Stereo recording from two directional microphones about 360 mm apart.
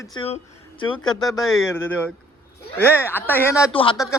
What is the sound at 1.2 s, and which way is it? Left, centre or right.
Speech, centre.